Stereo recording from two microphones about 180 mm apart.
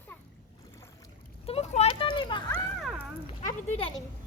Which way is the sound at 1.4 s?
35° left (ahead or behind).